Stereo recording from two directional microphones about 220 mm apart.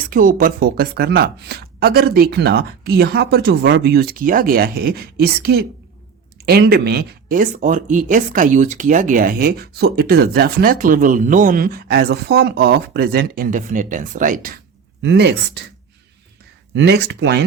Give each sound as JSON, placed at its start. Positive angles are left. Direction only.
{"t": 0.1, "sound": "speech", "side_deg": -40}
{"t": 15.0, "sound": "speech", "side_deg": -50}
{"t": 16.7, "sound": "speech", "side_deg": -50}